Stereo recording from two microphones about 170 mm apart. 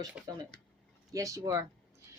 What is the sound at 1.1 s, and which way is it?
Speech, 20° right (ahead or behind).